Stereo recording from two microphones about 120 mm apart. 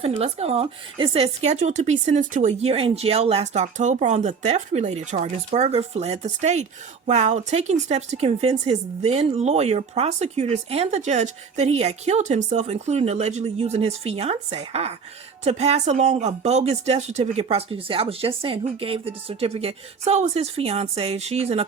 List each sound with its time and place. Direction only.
0.0 s speech: 55° right (ahead or behind)